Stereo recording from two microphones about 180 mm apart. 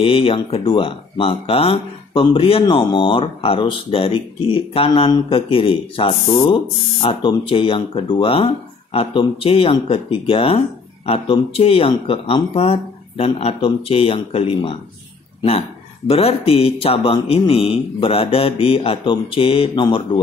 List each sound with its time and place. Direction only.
0.0 s speech: 30° left (ahead or behind)
16.1 s speech: 30° left (ahead or behind)